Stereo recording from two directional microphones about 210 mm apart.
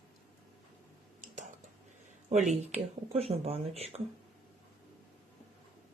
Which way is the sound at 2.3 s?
35° right (ahead or behind).